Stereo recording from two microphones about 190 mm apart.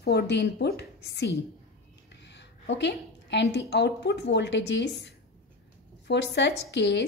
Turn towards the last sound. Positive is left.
turn(degrees=65)  # may be behind; listen again after turning